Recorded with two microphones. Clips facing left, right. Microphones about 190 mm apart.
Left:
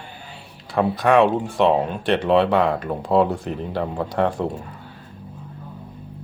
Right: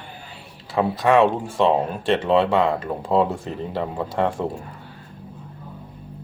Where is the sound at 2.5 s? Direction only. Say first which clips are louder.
Left 1 dB; 25° right (ahead or behind).